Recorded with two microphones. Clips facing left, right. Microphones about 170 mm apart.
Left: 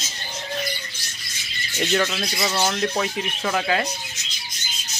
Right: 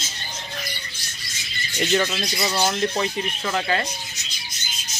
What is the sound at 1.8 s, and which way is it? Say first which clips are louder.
Speech: even; 5° right (ahead or behind).